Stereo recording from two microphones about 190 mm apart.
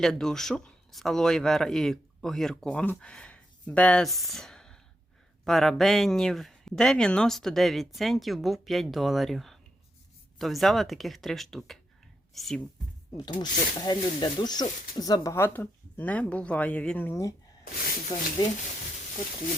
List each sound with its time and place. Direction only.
0.0 s speech: centre (ahead or behind)
13.4 s speech: 20° left (ahead or behind)